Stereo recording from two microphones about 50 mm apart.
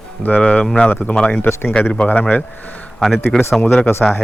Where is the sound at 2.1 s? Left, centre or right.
Left.